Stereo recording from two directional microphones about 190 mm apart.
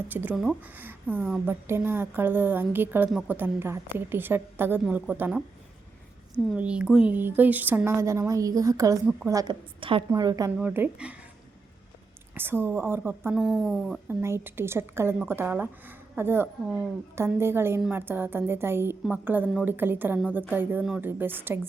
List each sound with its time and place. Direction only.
0.1 s a woman's voice: 10° right (ahead or behind)
6.6 s a woman's voice: 5° right (ahead or behind)
10.6 s a woman's voice: 10° right (ahead or behind)
12.3 s a woman's voice: 10° right (ahead or behind)
14.1 s a woman's voice: 15° right (ahead or behind)